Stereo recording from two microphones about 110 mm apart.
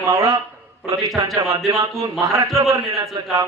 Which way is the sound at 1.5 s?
30° right (ahead or behind).